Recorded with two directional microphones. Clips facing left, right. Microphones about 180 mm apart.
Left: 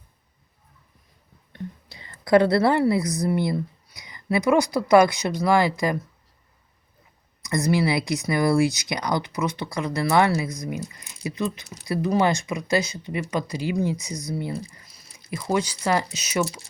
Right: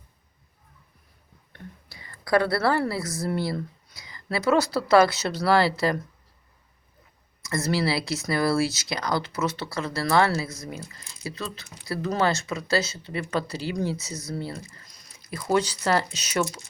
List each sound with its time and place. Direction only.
1.9 s a woman's voice: 25° left (ahead or behind)
7.4 s speech: 15° left (ahead or behind)